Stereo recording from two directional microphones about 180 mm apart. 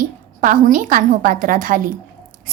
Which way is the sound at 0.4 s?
45° right (ahead or behind).